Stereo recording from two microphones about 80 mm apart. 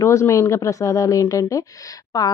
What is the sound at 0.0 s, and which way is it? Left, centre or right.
Speech, left.